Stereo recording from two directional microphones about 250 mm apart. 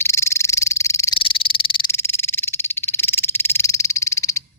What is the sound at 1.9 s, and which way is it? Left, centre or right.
Frog, centre.